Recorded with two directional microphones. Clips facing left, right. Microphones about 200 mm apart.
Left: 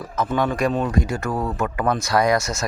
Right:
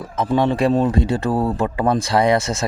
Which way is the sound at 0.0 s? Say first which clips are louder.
Right 4 dB; 25° right (ahead or behind).